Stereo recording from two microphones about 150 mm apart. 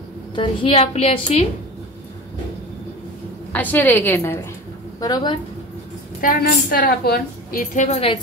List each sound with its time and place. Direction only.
0.4 s a woman's voice: 40° left (ahead or behind)
3.5 s a woman's voice: 10° left (ahead or behind)
6.2 s a woman's voice: 65° left (ahead or behind)